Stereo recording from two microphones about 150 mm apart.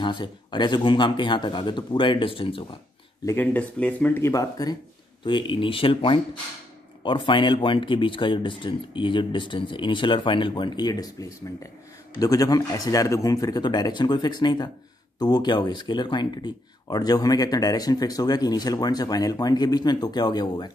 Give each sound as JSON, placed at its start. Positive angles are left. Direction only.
{"t": 0.0, "sound": "speech", "side_deg": 30}
{"t": 3.3, "sound": "speech", "side_deg": 10}